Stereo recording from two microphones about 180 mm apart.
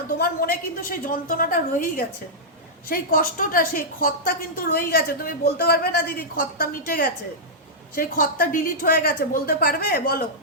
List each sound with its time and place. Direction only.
0.1 s a woman's voice: 55° left (ahead or behind)